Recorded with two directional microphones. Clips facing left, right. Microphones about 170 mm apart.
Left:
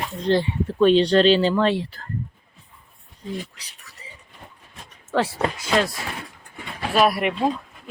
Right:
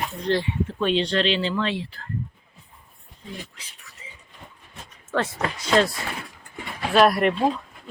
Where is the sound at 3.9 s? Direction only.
35° left (ahead or behind).